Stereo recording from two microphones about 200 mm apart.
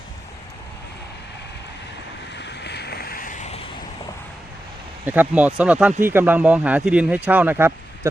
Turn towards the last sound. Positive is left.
turn(degrees=-10)  # may be behind; listen again after turning